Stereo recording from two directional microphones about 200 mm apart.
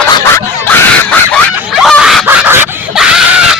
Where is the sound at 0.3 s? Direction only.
10° left (ahead or behind).